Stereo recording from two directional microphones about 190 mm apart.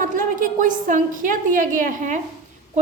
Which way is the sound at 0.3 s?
45° right (ahead or behind).